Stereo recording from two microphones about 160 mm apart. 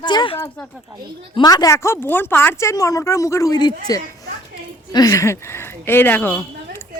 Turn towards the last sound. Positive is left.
turn(degrees=10)  # may be behind; listen again after turning